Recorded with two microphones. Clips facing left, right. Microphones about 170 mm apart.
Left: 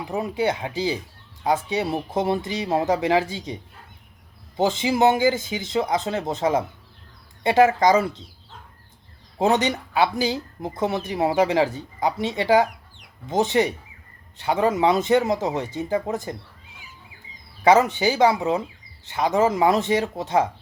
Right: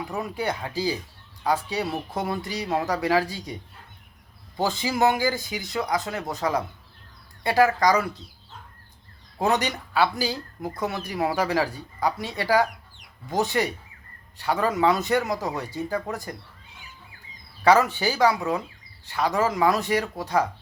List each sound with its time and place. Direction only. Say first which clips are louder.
0.0 s speech: left 5 dB; 25° left (ahead or behind)
9.4 s speech: left 4 dB; 20° left (ahead or behind)
17.6 s speech: left 2 dB; 20° left (ahead or behind)